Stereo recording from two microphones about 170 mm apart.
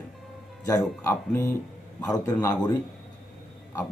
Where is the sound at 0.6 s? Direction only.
20° left (ahead or behind).